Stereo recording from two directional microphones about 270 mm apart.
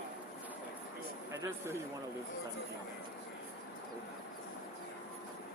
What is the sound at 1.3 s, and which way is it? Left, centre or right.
Speech, centre.